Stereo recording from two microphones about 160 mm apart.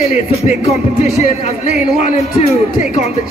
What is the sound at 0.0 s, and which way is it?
A man's voice, 40° left (ahead or behind).